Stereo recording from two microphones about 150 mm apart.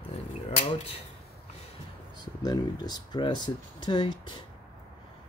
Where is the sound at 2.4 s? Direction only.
25° left (ahead or behind).